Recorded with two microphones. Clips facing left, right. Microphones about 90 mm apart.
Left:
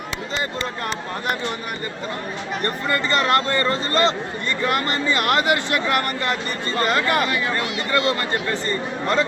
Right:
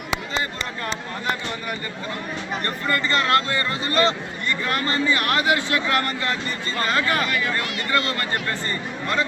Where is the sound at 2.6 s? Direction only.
20° left (ahead or behind).